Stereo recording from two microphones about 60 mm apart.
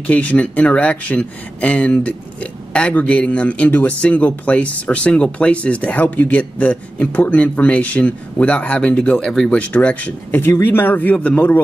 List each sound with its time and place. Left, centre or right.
0.0 s speech: left
10.3 s speech: left